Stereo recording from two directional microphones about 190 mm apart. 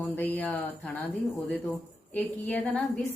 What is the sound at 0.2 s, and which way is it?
Speech, 10° left (ahead or behind).